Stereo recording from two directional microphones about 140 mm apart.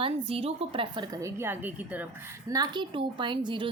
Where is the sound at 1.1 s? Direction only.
20° right (ahead or behind).